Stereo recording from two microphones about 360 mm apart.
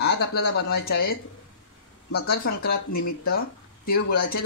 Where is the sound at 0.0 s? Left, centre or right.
Left.